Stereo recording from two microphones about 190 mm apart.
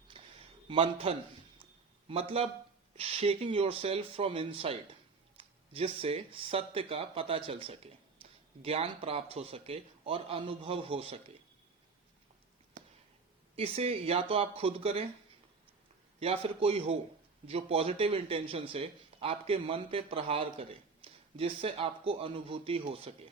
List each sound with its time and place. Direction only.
0.1 s a sound: 30° right (ahead or behind)
2.0 s a man's voice: 30° right (ahead or behind)
13.6 s speech: 30° right (ahead or behind)
16.2 s a man's voice: 30° right (ahead or behind)